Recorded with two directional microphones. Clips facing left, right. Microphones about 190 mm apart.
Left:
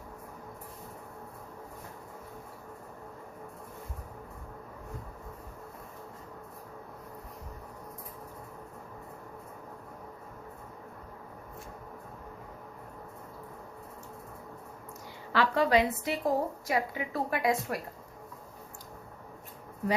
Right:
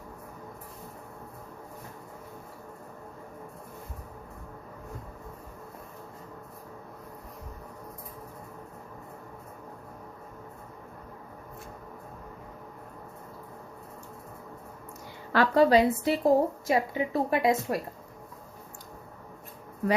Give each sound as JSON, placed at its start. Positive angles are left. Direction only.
{"t": 15.3, "sound": "a woman's voice", "side_deg": -45}
{"t": 15.6, "sound": "a woman's voice", "side_deg": -35}